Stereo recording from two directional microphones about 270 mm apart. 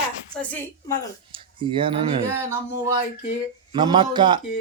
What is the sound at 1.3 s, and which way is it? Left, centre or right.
Speech, centre.